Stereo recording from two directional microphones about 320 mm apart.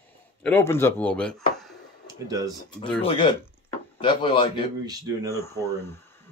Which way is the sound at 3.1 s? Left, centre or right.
Centre.